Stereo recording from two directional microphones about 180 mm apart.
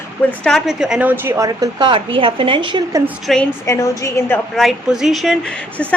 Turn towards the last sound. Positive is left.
turn(degrees=0)  # may be behind; listen again after turning